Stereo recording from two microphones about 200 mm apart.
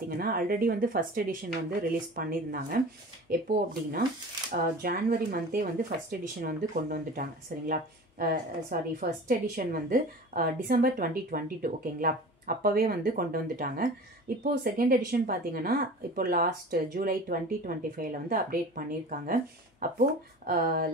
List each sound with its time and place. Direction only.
0.2 s speech: 50° right (ahead or behind)
20.4 s speech: 50° right (ahead or behind)